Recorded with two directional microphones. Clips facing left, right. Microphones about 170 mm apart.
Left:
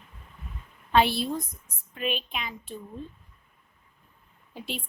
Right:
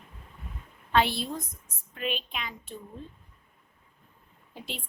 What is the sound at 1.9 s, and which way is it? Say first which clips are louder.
Speech: left 2 dB; 15° left (ahead or behind).